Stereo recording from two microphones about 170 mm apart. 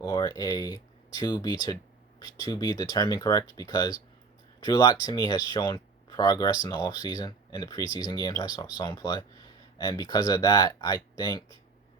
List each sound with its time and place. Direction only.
0.0 s speech: 20° left (ahead or behind)
1.6 s a sound: 25° left (ahead or behind)
2.5 s speech: 20° left (ahead or behind)